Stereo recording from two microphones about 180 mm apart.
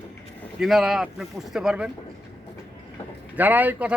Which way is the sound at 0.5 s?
Centre (ahead or behind).